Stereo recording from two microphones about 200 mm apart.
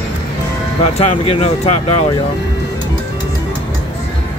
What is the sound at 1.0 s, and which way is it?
Speech, 30° left (ahead or behind).